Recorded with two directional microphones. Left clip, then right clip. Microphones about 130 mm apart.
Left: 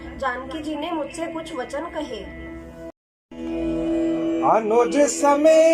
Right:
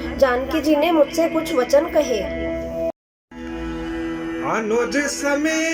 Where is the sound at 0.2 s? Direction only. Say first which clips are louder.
Right 9 dB; 45° right (ahead or behind).